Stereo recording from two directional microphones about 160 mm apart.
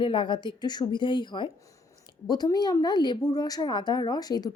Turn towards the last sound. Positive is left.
turn(degrees=25)  # may be behind; listen again after turning